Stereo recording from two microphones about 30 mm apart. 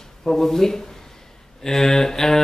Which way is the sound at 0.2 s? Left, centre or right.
Centre.